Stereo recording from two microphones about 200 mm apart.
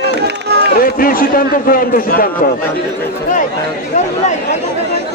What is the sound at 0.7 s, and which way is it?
A man's voice, 45° left (ahead or behind).